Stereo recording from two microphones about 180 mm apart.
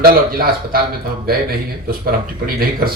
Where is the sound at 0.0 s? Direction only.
55° right (ahead or behind).